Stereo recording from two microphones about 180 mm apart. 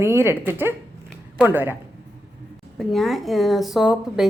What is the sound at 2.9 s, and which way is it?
A woman's voice, centre (ahead or behind).